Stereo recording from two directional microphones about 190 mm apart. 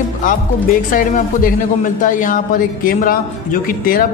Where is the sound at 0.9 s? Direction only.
45° left (ahead or behind).